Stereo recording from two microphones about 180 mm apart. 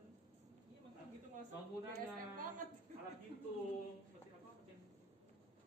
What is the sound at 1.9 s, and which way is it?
Speech, 50° right (ahead or behind).